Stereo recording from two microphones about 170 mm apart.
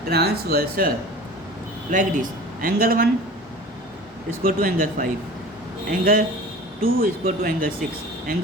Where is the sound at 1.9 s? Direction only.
50° right (ahead or behind).